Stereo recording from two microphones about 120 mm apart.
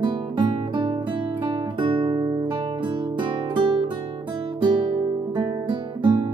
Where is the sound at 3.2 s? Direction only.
40° right (ahead or behind).